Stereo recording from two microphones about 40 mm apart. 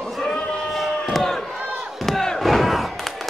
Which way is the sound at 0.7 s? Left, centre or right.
Centre.